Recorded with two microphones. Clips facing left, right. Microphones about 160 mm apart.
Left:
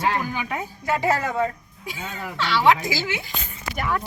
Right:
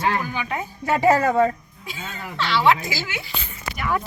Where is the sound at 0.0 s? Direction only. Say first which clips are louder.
Right 1 dB; 5° left (ahead or behind).